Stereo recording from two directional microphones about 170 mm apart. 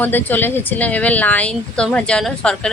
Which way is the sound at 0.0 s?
10° left (ahead or behind).